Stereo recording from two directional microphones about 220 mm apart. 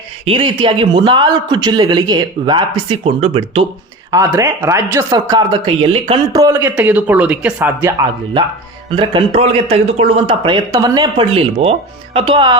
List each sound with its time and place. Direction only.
0.3 s speech: 25° right (ahead or behind)
4.1 s speech: 15° right (ahead or behind)
6.4 s speech: 10° right (ahead or behind)
9.0 s speech: 25° right (ahead or behind)